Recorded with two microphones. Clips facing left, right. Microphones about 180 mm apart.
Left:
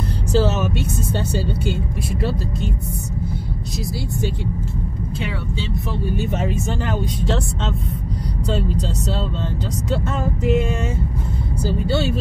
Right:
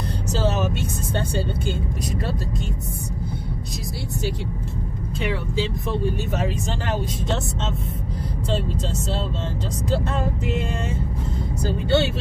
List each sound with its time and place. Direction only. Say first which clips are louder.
11.8 s speech: right 2 dB; centre (ahead or behind)